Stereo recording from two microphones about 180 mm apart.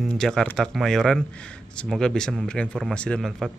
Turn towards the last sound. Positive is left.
turn(degrees=5)  # may be behind; listen again after turning